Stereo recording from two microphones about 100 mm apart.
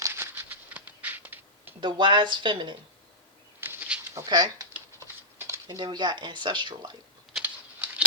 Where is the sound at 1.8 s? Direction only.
50° right (ahead or behind).